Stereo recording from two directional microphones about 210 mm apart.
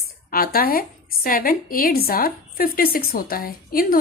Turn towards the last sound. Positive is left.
turn(degrees=45)  # may be behind; listen again after turning